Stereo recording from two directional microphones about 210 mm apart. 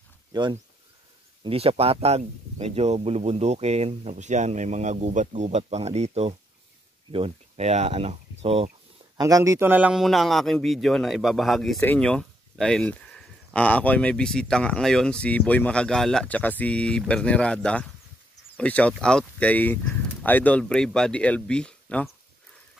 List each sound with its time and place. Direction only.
0.3 s speech: 20° right (ahead or behind)
9.2 s speech: 15° right (ahead or behind); by 22.1 s 5° left (ahead or behind)